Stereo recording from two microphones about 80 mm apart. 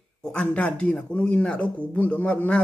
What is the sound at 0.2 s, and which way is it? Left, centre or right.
Speech, centre.